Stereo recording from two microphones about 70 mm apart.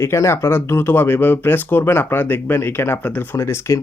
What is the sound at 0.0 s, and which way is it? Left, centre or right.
Speech, left.